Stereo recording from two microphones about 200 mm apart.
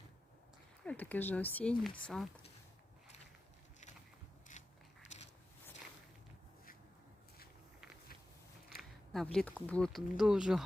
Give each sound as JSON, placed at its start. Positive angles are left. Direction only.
{"t": 0.9, "sound": "speech", "side_deg": 10}
{"t": 4.5, "sound": "mechanisms", "side_deg": 40}
{"t": 8.7, "sound": "speech", "side_deg": 0}